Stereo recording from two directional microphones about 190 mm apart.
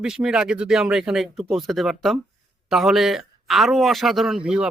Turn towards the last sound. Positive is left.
turn(degrees=-5)  # may be behind; listen again after turning